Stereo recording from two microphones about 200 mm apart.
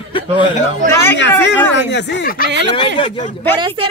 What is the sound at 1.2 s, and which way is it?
Speech, 60° left (ahead or behind).